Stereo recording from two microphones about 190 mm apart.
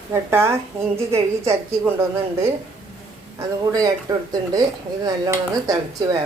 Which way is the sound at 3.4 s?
15° right (ahead or behind).